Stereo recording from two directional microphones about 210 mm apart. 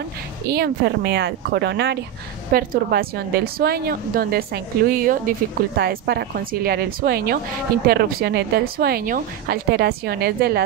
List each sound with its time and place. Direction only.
0.5 s a woman's voice: 50° right (ahead or behind)